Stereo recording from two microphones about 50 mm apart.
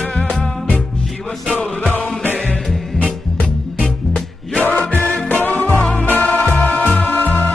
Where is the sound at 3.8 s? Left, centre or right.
Left.